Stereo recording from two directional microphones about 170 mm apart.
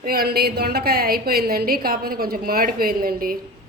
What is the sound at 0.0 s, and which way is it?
Speech, 60° right (ahead or behind).